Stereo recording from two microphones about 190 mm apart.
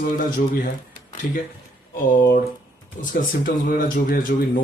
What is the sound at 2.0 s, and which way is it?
Speech, 45° left (ahead or behind).